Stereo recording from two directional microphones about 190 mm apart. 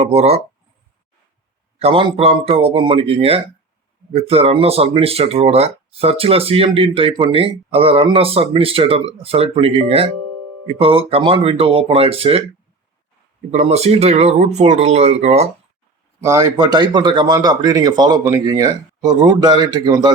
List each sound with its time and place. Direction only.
0.0 s speech: 30° right (ahead or behind)
1.8 s speech: 30° right (ahead or behind)
10.8 s speech: 30° right (ahead or behind)
13.5 s speech: 35° right (ahead or behind)
16.2 s speech: 15° right (ahead or behind)